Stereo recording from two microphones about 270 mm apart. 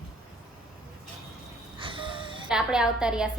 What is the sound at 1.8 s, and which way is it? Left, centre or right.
Wheeze, centre.